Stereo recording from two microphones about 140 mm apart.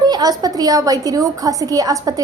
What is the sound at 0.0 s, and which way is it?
A woman's voice, 30° right (ahead or behind).